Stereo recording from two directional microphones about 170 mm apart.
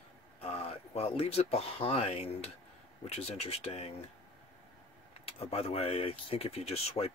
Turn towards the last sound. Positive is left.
turn(degrees=35)  # may be behind; listen again after turning